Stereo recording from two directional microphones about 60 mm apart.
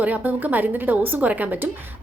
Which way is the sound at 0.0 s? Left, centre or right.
Right.